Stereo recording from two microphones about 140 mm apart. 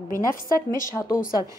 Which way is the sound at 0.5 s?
75° left (ahead or behind).